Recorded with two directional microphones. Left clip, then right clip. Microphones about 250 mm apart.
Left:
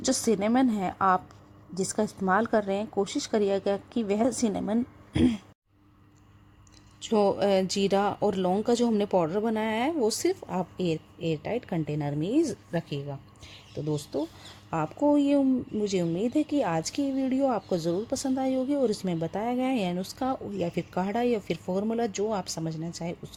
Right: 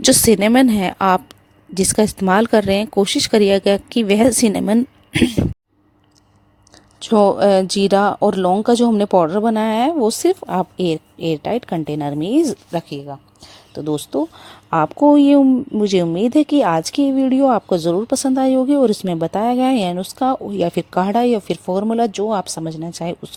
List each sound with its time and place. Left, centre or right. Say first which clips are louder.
0.0 s a woman's voice: right 13 dB; right
7.0 s speech: right 11 dB; right